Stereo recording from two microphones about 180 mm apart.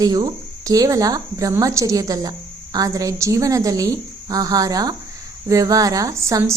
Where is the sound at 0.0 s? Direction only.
20° right (ahead or behind).